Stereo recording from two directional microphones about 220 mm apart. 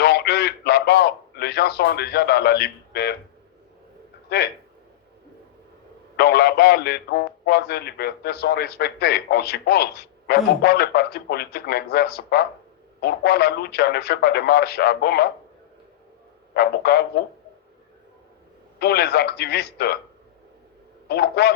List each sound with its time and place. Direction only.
0.0 s a sound: 45° left (ahead or behind)
4.3 s a man's voice: 45° left (ahead or behind)
6.1 s a man's voice: 45° left (ahead or behind)
16.6 s a man's voice: 45° left (ahead or behind)
18.8 s a man's voice: 45° left (ahead or behind)
21.1 s a man's voice: 45° left (ahead or behind)